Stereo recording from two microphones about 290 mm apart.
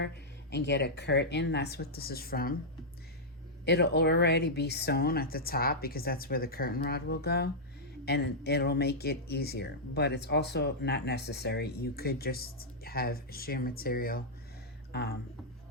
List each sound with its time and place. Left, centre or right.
0.5 s speech: left
3.7 s speech: left